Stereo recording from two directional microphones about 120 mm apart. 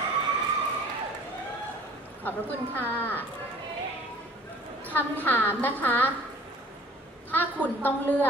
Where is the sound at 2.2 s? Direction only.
15° left (ahead or behind).